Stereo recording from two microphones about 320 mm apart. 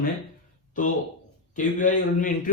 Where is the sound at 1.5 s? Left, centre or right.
Left.